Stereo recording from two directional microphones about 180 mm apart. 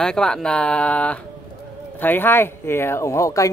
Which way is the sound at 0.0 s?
5° left (ahead or behind).